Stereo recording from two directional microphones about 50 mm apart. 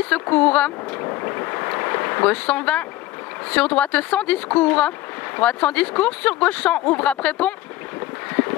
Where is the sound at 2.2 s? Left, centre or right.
Left.